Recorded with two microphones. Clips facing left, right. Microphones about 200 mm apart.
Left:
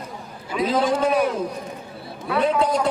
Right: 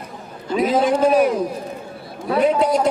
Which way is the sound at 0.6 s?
25° right (ahead or behind).